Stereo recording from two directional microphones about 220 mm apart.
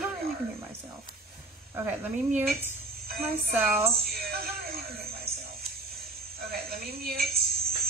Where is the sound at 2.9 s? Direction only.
45° right (ahead or behind).